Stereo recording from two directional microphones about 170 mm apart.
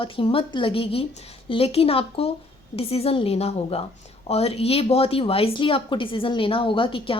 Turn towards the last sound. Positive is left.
turn(degrees=30)  # may be behind; listen again after turning